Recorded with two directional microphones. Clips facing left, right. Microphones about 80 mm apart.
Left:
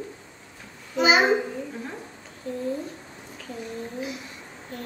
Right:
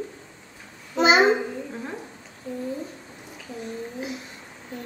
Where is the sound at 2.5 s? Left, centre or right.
Centre.